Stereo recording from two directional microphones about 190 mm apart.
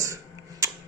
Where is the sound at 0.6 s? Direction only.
15° right (ahead or behind).